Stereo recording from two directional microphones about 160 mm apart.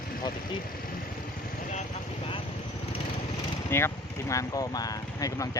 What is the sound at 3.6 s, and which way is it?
Speech, 15° left (ahead or behind).